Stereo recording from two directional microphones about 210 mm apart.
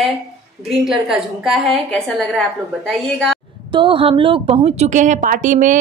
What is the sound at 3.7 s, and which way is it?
A woman's voice, 25° right (ahead or behind).